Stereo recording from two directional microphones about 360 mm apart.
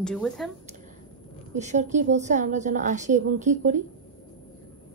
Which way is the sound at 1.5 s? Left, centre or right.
Centre.